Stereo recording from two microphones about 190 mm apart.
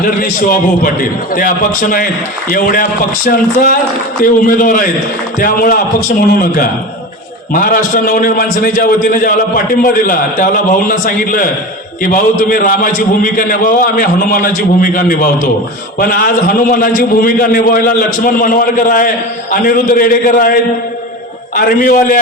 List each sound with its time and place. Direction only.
0.0 s a man's voice: 50° left (ahead or behind)